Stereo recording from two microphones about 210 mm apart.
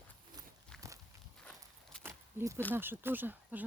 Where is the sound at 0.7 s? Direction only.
5° left (ahead or behind).